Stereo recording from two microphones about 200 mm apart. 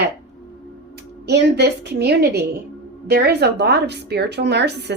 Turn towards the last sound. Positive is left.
turn(degrees=-60)  # may be behind; listen again after turning